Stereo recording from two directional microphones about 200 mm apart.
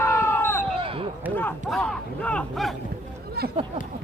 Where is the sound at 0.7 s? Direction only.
25° right (ahead or behind).